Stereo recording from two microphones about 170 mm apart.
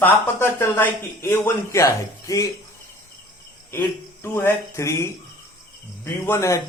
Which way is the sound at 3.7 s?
15° left (ahead or behind).